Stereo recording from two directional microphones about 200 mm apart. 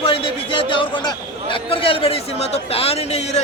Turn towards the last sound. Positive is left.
turn(degrees=30)  # may be behind; listen again after turning